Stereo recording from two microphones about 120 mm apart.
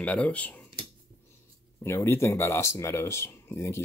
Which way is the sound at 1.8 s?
20° left (ahead or behind).